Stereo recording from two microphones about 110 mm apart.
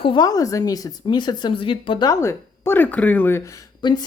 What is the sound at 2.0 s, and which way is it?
Speech, 25° left (ahead or behind).